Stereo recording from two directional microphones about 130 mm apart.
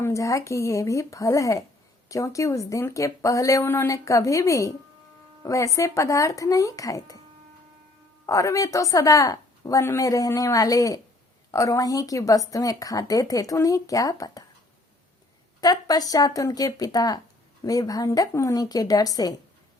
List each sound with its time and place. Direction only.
0.0 s a woman's voice: 25° left (ahead or behind)
8.3 s a woman's voice: 25° left (ahead or behind)
15.6 s a woman's voice: 30° left (ahead or behind)